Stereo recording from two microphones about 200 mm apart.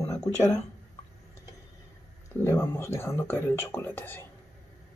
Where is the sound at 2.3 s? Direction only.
15° left (ahead or behind).